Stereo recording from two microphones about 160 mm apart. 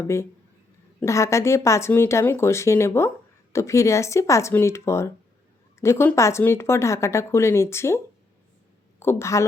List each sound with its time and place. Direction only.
0.9 s a woman's voice: 20° left (ahead or behind)